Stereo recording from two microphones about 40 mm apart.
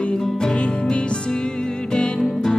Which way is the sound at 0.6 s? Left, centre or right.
Left.